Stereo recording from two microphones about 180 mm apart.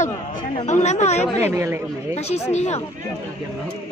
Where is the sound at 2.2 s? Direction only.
35° left (ahead or behind).